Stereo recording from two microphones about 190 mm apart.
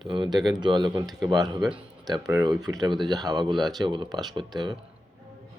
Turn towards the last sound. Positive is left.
turn(degrees=-20)  # may be behind; listen again after turning